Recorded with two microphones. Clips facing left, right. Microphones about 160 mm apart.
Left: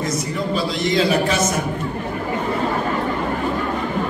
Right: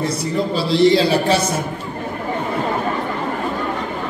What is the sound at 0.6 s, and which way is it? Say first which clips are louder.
Speech: right 7 dB; 30° right (ahead or behind).